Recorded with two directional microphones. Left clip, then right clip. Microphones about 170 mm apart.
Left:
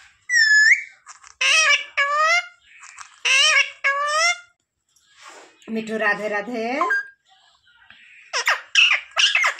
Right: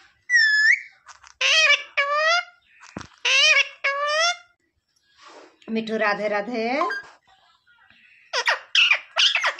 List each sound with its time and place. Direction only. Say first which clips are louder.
0.3 s a sound: left 3 dB; 35° right (ahead or behind)
5.7 s a woman's voice: left 1 dB; 20° left (ahead or behind)
8.3 s squawk: left 1 dB; 35° right (ahead or behind)